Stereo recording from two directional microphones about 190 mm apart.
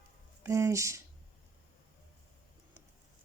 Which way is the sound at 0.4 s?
15° right (ahead or behind).